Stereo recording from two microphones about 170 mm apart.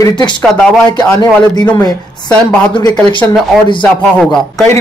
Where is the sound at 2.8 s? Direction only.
25° left (ahead or behind).